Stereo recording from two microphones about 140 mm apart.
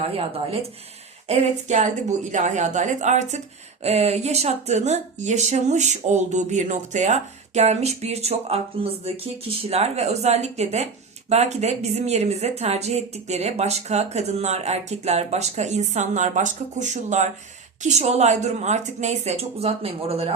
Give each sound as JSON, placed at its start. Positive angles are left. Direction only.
{"t": 0.0, "sound": "speech", "side_deg": -45}
{"t": 1.3, "sound": "a woman's voice", "side_deg": -55}